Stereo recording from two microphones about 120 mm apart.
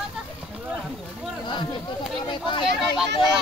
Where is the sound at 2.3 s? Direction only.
45° left (ahead or behind).